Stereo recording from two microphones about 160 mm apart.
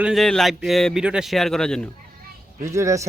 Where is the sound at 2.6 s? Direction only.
20° right (ahead or behind).